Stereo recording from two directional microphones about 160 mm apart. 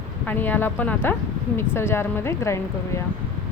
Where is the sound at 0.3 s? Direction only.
10° left (ahead or behind).